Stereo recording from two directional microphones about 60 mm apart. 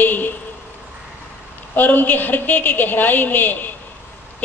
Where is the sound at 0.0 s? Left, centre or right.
Left.